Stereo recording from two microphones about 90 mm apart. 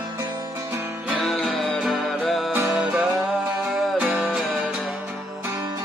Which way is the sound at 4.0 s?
Centre (ahead or behind).